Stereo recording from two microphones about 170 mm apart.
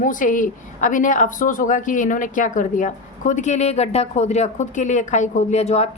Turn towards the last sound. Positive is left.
turn(degrees=40)  # may be behind; listen again after turning